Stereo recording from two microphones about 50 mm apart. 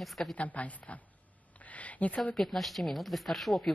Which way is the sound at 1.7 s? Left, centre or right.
Left.